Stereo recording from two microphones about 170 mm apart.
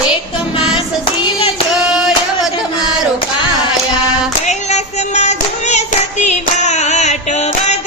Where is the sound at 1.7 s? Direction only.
5° right (ahead or behind).